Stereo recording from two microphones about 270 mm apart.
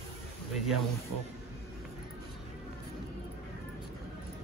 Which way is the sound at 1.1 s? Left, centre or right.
Right.